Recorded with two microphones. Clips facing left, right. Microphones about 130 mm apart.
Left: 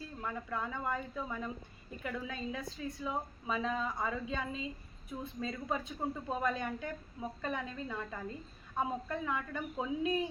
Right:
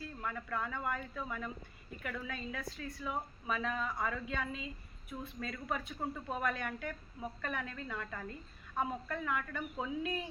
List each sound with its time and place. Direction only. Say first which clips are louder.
0.2 s a woman's voice: left 1 dB; 15° left (ahead or behind)